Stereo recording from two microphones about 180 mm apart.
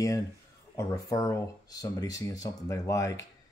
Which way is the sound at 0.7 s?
20° left (ahead or behind).